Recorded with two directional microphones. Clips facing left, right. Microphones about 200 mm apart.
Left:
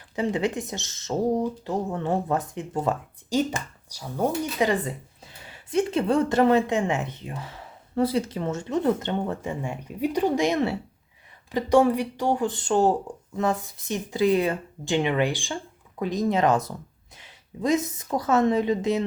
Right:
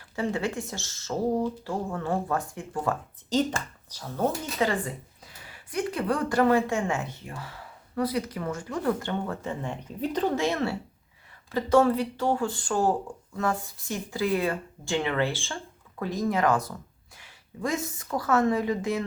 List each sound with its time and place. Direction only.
0.2 s speech: 20° left (ahead or behind)
5.7 s a woman's voice: 25° left (ahead or behind)